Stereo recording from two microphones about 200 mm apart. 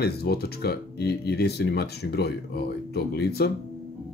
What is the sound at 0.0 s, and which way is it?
Speech, 50° left (ahead or behind).